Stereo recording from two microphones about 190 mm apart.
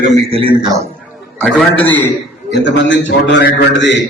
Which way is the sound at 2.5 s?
65° left (ahead or behind).